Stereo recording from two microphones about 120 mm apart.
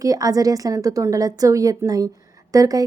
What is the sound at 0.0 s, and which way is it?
A woman's voice, 30° right (ahead or behind).